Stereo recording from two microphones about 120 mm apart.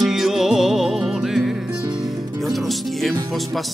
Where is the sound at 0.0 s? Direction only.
5° right (ahead or behind).